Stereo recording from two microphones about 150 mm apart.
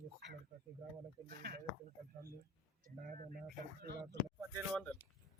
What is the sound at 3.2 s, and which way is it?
Speech, 60° right (ahead or behind).